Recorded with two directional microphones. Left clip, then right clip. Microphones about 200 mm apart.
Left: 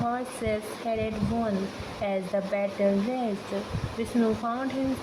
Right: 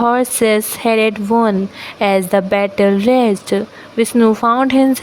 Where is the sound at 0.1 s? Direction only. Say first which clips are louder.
Right 16 dB; 65° right (ahead or behind).